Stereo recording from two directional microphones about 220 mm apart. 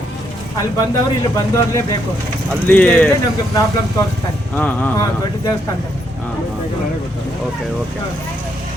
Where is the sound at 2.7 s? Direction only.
5° left (ahead or behind).